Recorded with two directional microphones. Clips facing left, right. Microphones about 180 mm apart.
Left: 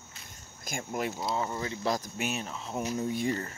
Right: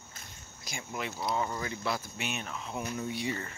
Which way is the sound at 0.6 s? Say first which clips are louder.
Left 5 dB; 45° left (ahead or behind).